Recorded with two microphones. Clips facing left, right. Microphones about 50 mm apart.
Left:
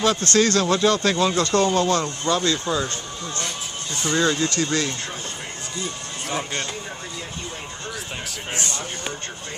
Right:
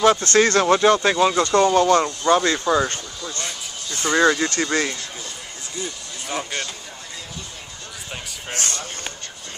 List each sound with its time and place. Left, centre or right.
0.0 s speech: right
4.0 s speech: right